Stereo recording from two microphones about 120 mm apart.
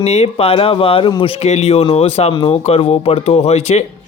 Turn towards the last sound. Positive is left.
turn(degrees=60)  # may be behind; listen again after turning